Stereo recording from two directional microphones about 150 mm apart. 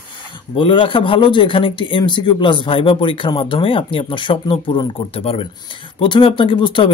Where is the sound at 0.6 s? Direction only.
35° left (ahead or behind).